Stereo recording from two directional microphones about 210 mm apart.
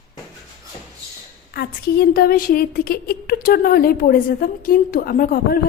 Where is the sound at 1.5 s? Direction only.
45° left (ahead or behind).